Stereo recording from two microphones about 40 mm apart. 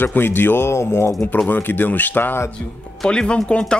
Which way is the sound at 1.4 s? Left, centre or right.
Left.